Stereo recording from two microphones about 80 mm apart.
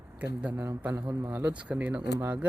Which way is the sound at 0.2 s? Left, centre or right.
Centre.